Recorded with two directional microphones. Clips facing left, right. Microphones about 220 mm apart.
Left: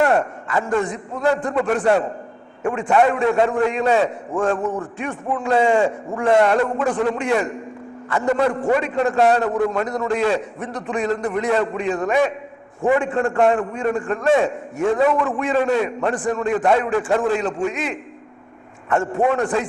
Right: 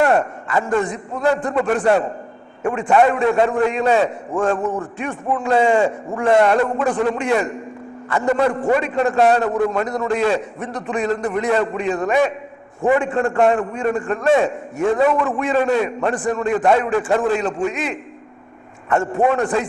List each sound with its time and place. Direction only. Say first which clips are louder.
0.0 s a man's voice: right 1 dB; 20° right (ahead or behind)
4.9 s a man's voice: right 2 dB; 15° right (ahead or behind)
8.2 s a man's voice: right 1 dB; 20° right (ahead or behind)